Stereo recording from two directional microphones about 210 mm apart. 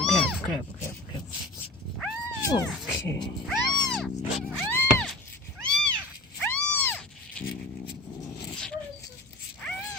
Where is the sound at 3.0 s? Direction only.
15° left (ahead or behind).